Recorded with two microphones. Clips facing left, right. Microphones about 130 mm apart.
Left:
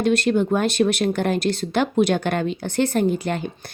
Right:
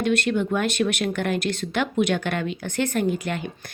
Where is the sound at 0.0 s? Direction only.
35° left (ahead or behind).